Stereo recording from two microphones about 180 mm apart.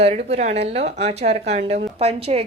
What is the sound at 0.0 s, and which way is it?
A woman's voice, 35° right (ahead or behind).